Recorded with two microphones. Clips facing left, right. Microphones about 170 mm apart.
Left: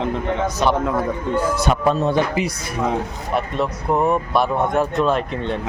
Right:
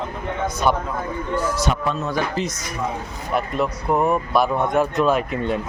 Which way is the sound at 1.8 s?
35° left (ahead or behind).